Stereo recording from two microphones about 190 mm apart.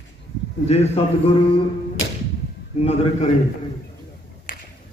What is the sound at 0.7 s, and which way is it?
Speech, 35° left (ahead or behind).